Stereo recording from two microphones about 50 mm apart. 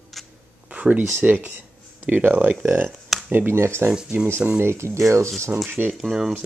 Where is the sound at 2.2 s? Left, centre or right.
Right.